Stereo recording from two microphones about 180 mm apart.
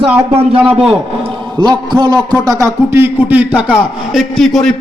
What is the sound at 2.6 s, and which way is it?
A man's voice, 15° right (ahead or behind).